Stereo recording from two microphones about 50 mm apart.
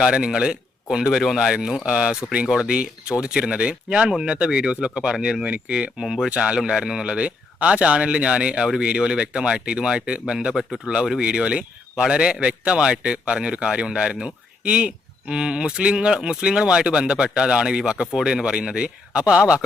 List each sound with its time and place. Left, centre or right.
0.0 s speech: centre
1.9 s speech: right
5.5 s speech: right
6.0 s speech: centre
10.5 s speech: centre
11.2 s speech: centre